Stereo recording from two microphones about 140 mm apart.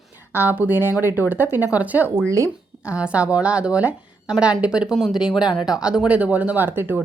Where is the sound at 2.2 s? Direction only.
20° right (ahead or behind).